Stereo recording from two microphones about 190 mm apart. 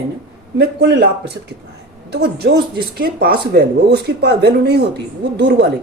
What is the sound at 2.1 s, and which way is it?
Speech, 60° right (ahead or behind).